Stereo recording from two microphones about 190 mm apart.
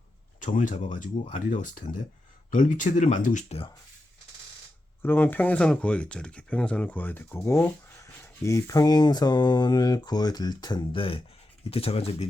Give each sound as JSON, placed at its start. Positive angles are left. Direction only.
{"t": 0.3, "sound": "speech", "side_deg": 45}
{"t": 1.2, "sound": "speech", "side_deg": 30}
{"t": 1.6, "sound": "speech", "side_deg": 45}
{"t": 5.0, "sound": "speech", "side_deg": 10}